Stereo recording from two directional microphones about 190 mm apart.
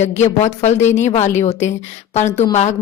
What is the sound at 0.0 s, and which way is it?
Speech, 35° left (ahead or behind).